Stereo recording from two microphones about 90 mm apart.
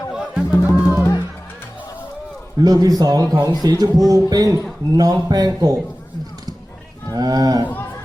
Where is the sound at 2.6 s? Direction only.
45° right (ahead or behind).